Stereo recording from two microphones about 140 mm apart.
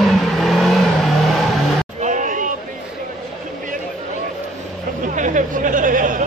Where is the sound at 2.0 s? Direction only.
65° right (ahead or behind).